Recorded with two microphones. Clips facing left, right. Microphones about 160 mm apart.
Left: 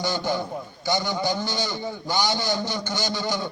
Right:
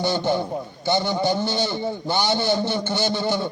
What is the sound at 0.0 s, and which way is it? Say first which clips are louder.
A man's voice: right 4 dB; 25° right (ahead or behind).